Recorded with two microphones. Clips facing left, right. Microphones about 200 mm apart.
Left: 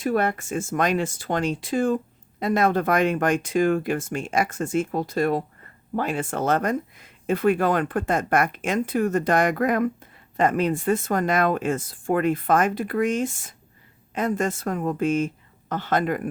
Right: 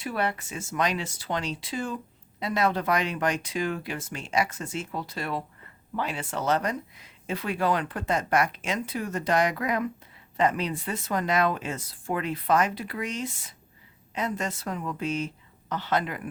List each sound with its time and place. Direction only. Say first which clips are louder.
0.0 s speech: left 6 dB; 45° left (ahead or behind)